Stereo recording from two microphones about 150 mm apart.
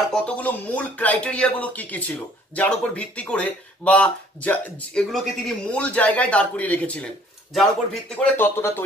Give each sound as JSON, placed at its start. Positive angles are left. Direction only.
{"t": 0.1, "sound": "speech", "side_deg": 10}
{"t": 8.4, "sound": "speech", "side_deg": 15}